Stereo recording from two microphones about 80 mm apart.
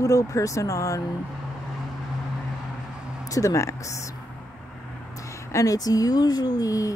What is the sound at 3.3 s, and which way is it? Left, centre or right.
Speech, left.